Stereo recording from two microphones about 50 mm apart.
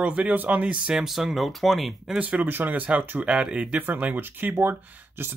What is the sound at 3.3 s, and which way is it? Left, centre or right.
Speech, centre.